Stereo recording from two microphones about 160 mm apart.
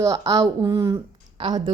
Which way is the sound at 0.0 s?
20° right (ahead or behind).